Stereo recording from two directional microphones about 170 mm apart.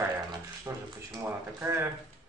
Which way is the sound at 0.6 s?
15° right (ahead or behind).